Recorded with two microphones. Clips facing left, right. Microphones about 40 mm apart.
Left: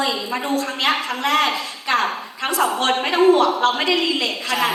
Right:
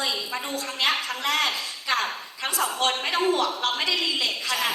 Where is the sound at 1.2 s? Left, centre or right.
Left.